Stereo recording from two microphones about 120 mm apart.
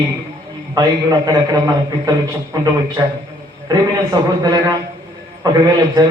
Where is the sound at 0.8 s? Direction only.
30° right (ahead or behind).